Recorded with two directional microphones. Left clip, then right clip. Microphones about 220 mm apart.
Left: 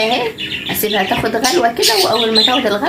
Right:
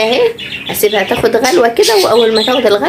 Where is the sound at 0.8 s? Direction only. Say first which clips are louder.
Right 6 dB; 30° right (ahead or behind).